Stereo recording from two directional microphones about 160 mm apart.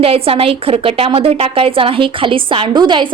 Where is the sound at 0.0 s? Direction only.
35° right (ahead or behind).